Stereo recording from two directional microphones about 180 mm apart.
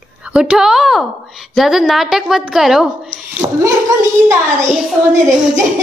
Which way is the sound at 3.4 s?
20° right (ahead or behind).